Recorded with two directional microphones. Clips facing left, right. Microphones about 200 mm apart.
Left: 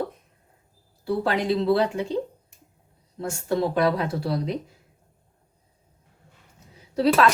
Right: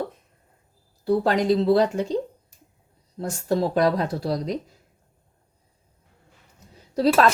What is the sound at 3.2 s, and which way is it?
Speech, 40° right (ahead or behind).